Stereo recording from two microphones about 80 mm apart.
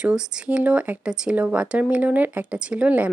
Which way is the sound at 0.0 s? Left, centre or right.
Centre.